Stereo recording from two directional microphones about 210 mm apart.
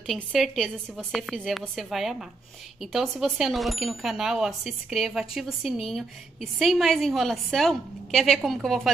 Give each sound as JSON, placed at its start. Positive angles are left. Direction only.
{"t": 0.0, "sound": "speech", "side_deg": 0}